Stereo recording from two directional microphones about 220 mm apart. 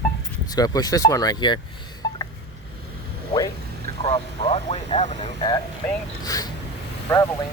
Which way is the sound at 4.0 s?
25° left (ahead or behind).